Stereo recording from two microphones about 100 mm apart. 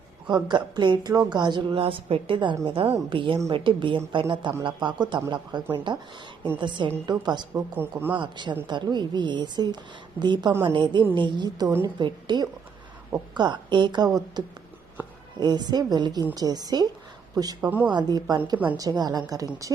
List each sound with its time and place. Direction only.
0.3 s a woman's voice: 45° right (ahead or behind)
2.6 s a woman's voice: 65° right (ahead or behind); by 7.4 s 45° right (ahead or behind)
7.5 s speech: 20° right (ahead or behind)
8.2 s a woman's voice: 50° right (ahead or behind)
15.0 s music: 20° right (ahead or behind)
15.4 s a woman's voice: 45° right (ahead or behind)